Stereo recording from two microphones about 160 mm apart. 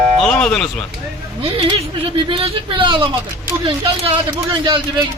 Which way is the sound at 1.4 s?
35° right (ahead or behind).